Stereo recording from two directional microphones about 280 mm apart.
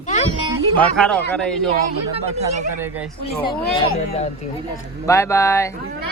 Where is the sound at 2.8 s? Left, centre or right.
Centre.